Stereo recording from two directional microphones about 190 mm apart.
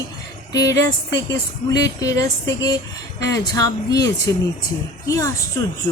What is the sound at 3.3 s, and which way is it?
A woman's voice, 20° left (ahead or behind).